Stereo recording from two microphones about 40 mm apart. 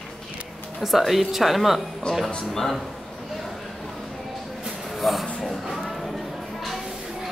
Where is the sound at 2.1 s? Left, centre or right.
Left.